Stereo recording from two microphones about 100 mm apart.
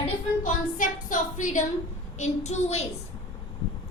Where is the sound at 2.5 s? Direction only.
90° left.